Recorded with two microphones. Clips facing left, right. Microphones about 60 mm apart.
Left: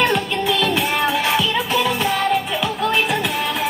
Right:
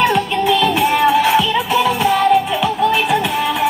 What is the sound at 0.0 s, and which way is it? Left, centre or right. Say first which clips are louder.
Music: right 4 dB; centre.